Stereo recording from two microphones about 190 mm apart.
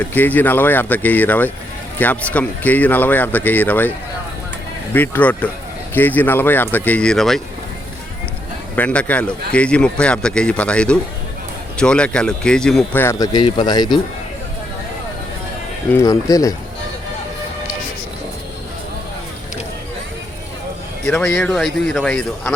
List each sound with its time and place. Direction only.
0.0 s speech: 10° left (ahead or behind)
4.9 s speech: 10° left (ahead or behind)
8.7 s speech: 5° left (ahead or behind)
15.9 s speech: 15° left (ahead or behind)
21.1 s speech: 5° left (ahead or behind)